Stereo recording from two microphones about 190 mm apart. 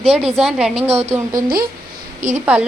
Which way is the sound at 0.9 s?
35° right (ahead or behind).